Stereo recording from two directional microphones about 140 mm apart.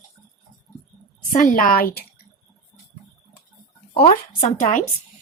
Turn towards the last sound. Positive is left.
turn(degrees=65)  # may be behind; listen again after turning